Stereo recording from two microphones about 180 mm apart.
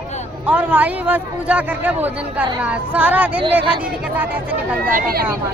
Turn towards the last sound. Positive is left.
turn(degrees=-55)  # may be behind; listen again after turning